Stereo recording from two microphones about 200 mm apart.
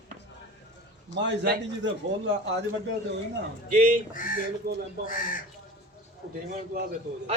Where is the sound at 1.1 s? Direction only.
65° right (ahead or behind).